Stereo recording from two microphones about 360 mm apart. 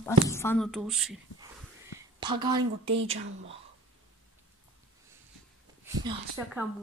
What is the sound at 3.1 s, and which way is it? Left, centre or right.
Speech, right.